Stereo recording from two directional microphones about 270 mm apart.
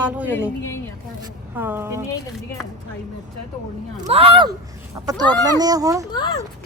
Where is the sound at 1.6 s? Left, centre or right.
Centre.